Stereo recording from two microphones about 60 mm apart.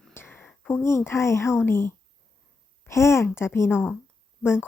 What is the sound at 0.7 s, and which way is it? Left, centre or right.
A woman's voice, left.